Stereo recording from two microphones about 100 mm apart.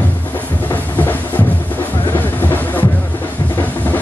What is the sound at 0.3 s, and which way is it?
Music, 20° left (ahead or behind).